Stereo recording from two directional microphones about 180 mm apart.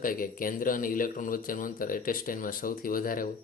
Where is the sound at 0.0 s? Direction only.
50° left (ahead or behind).